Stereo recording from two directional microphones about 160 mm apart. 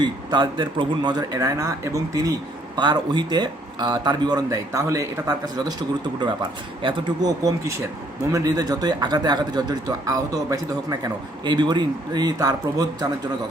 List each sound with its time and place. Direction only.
0.0 s speech: 30° right (ahead or behind)
6.8 s speech: 30° right (ahead or behind)